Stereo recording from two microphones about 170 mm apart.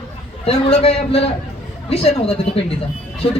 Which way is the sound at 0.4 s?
35° left (ahead or behind).